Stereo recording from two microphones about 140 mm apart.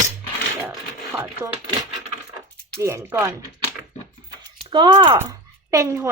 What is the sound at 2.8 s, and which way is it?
Speech, 20° right (ahead or behind).